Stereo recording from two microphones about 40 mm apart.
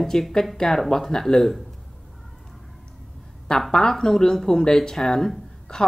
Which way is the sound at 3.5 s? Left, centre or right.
Centre.